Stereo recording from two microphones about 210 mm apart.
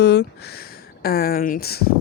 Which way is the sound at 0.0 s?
55° left (ahead or behind).